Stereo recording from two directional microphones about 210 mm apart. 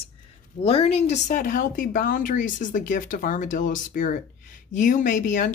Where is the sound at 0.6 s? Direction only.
30° left (ahead or behind).